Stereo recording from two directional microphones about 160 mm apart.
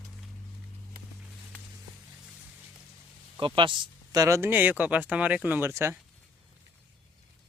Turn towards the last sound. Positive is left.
turn(degrees=-15)  # may be behind; listen again after turning